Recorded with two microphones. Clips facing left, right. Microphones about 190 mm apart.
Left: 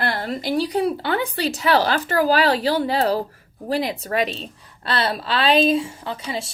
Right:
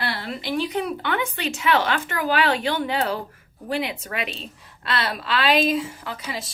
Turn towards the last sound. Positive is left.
turn(degrees=30)  # may be behind; listen again after turning